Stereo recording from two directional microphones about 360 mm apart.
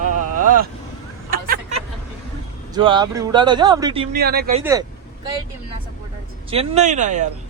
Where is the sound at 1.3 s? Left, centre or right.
Right.